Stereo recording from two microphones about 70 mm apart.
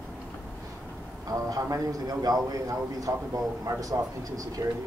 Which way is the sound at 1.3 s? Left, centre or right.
Right.